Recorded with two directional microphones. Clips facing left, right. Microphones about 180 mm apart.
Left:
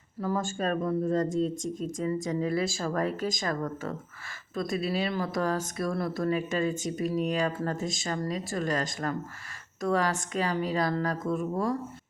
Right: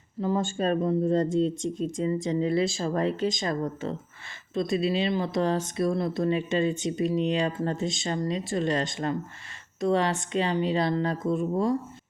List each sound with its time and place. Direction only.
0.2 s speech: 25° right (ahead or behind)